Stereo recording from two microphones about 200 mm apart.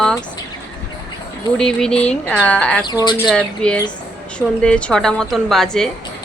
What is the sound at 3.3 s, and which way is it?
A woman's voice, 5° left (ahead or behind).